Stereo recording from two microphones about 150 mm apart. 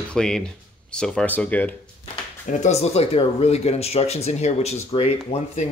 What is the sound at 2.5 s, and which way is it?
Speech, 50° left (ahead or behind).